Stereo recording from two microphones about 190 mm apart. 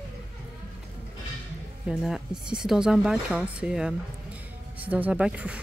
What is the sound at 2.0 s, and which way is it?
Speech, 5° right (ahead or behind).